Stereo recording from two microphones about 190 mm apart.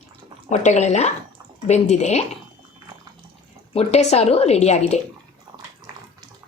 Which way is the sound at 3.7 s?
35° left (ahead or behind).